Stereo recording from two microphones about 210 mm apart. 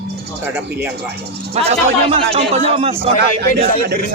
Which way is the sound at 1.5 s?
30° right (ahead or behind).